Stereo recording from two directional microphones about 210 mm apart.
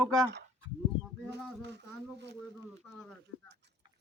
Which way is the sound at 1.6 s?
55° right (ahead or behind).